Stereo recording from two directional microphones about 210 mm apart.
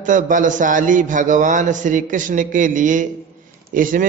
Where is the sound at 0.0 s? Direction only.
40° right (ahead or behind).